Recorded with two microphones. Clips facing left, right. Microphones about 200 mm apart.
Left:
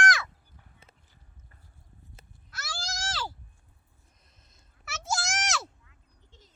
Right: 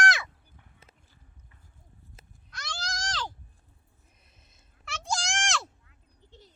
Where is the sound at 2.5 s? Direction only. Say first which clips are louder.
Even; 5° left (ahead or behind).